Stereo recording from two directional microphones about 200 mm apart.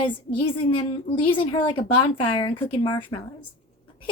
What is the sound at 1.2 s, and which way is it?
A woman's voice, 25° left (ahead or behind).